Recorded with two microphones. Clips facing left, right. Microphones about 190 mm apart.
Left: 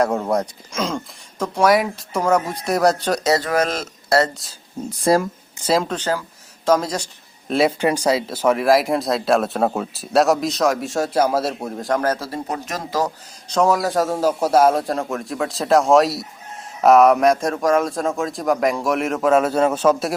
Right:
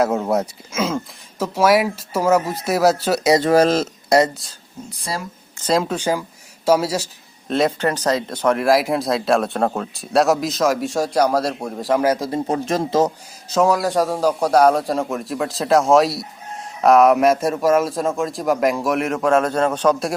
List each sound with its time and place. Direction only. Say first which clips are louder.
0.0 s speech: right 1 dB; 5° right (ahead or behind)
3.3 s speech: right 6 dB; 30° right (ahead or behind)
4.1 s speech: right 2 dB; 15° right (ahead or behind)
5.1 s speech: left 12 dB; 50° left (ahead or behind)
5.5 s speech: even; 10° left (ahead or behind)
5.8 s speech: right 2 dB; 10° right (ahead or behind)
7.5 s speech: left 1 dB; 10° left (ahead or behind); by 12.3 s 10° right (ahead or behind)
12.3 s speech: right 6 dB; 30° right (ahead or behind)
13.5 s speech: right 1 dB; centre (ahead or behind)